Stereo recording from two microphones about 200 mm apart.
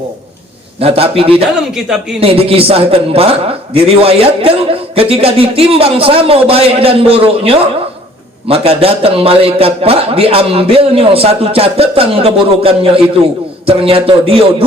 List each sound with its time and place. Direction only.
0.8 s a man's voice: 30° right (ahead or behind)
1.7 s speech: 5° right (ahead or behind)
2.2 s a man's voice: 30° right (ahead or behind)